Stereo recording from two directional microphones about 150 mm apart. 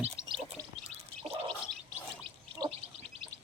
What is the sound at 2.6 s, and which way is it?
Bird, 25° right (ahead or behind).